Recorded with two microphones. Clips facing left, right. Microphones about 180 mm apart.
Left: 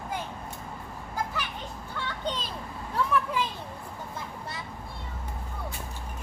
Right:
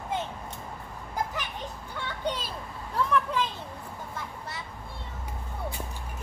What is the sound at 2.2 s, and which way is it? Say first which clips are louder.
Children playing: right 2 dB; 10° right (ahead or behind).